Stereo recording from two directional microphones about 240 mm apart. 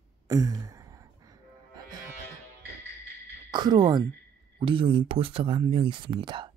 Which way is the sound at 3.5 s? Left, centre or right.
Centre.